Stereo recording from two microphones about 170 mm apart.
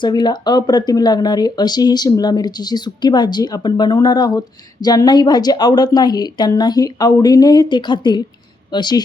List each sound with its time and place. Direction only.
0.0 s a woman's voice: 25° left (ahead or behind)